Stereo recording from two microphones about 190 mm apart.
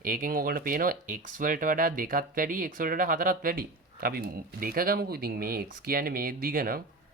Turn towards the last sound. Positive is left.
turn(degrees=-50)  # may be behind; listen again after turning